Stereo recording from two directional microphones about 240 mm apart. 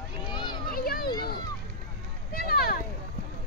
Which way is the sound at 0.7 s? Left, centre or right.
Left.